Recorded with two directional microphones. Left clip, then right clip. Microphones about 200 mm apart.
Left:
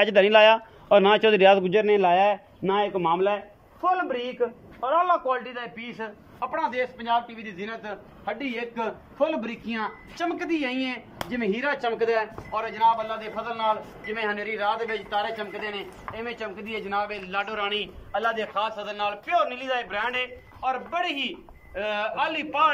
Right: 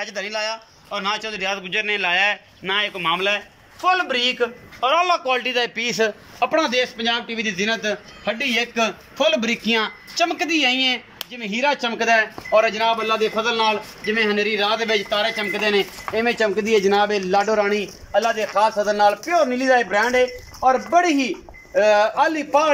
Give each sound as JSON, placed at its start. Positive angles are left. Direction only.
{"t": 0.0, "sound": "a man's voice", "side_deg": 50}
{"t": 3.8, "sound": "a man's voice", "side_deg": 5}
{"t": 4.7, "sound": "a man's voice", "side_deg": -20}
{"t": 5.9, "sound": "speech", "side_deg": -50}
{"t": 9.2, "sound": "a man's voice", "side_deg": -35}
{"t": 10.2, "sound": "speech", "side_deg": -55}
{"t": 17.3, "sound": "a man's voice", "side_deg": -30}